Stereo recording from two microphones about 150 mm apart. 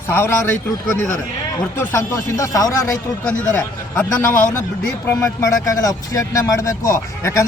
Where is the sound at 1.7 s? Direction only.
15° left (ahead or behind).